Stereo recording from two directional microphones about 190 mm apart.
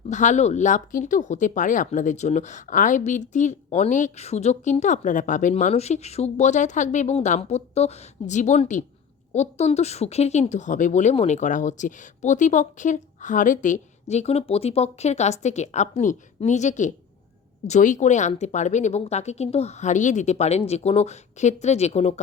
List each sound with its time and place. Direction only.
0.1 s speech: 40° left (ahead or behind)